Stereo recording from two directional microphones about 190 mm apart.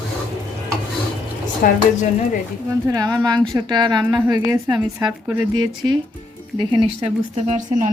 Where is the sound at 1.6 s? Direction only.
50° left (ahead or behind).